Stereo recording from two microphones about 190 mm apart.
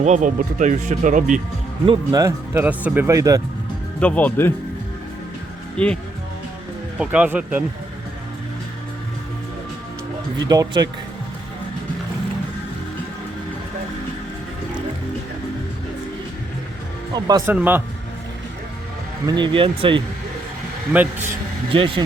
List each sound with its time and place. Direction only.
0.0 s speech: 40° right (ahead or behind)
1.9 s speech: 20° right (ahead or behind)
4.0 s speech: 10° left (ahead or behind)
5.7 s speech: 5° left (ahead or behind)
7.0 s speech: 5° right (ahead or behind)
10.5 s speech: 20° right (ahead or behind)
17.2 s speech: 20° right (ahead or behind)
17.5 s speech: 10° right (ahead or behind)
19.2 s speech: 20° right (ahead or behind)
20.9 s speech: 10° right (ahead or behind)
21.7 s speech: 25° right (ahead or behind)